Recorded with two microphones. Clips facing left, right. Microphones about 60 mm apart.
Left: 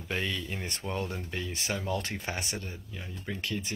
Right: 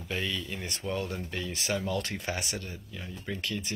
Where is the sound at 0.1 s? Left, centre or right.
Left.